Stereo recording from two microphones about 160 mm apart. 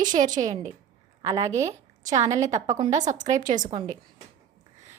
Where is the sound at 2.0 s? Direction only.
50° right (ahead or behind).